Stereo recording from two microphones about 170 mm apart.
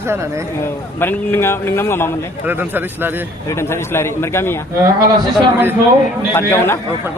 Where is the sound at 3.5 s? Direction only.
15° left (ahead or behind).